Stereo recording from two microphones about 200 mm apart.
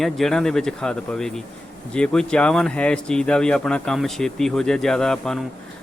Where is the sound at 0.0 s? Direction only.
Centre (ahead or behind).